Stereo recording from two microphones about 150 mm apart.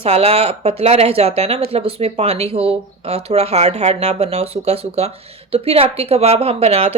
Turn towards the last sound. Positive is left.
turn(degrees=-45)  # may be behind; listen again after turning